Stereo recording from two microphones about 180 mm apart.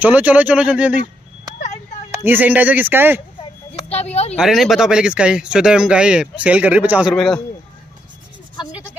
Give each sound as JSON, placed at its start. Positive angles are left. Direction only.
{"t": 0.0, "sound": "speech", "side_deg": -10}
{"t": 2.2, "sound": "speech", "side_deg": -10}
{"t": 3.7, "sound": "speech", "side_deg": 35}
{"t": 4.4, "sound": "speech", "side_deg": 0}